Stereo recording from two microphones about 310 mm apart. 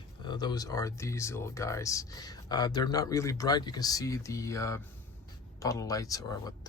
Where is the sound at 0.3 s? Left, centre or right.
Centre.